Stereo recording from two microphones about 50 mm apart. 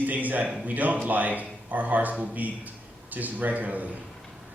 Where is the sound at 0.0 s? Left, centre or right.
Right.